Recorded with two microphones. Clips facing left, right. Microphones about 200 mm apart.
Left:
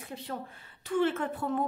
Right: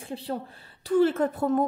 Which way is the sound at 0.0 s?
30° right (ahead or behind).